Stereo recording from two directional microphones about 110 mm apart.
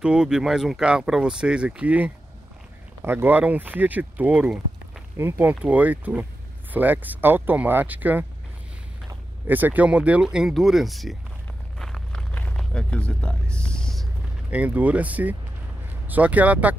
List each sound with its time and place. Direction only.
0.0 s speech: 5° right (ahead or behind)
5.1 s speech: 20° right (ahead or behind)
9.5 s speech: 15° right (ahead or behind); by 11.1 s centre (ahead or behind)
11.8 s a sound: 5° left (ahead or behind)
14.5 s speech: 15° right (ahead or behind)